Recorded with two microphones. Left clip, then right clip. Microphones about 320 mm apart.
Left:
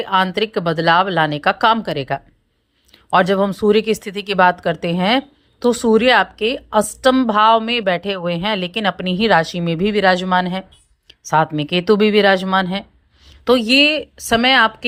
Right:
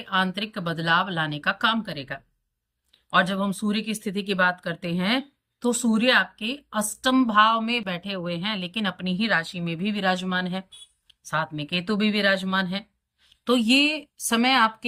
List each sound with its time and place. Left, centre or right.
0.0 s a woman's voice: centre